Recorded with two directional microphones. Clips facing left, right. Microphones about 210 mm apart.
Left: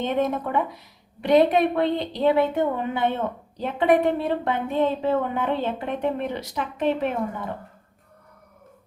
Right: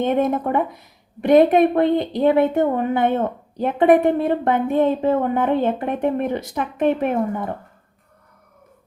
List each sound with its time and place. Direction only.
0.0 s a woman's voice: 50° right (ahead or behind)